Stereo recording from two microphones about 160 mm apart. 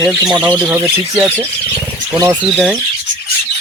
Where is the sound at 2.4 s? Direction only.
Centre (ahead or behind).